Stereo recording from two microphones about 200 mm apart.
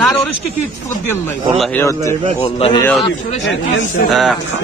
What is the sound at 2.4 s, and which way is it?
Speech, 30° left (ahead or behind).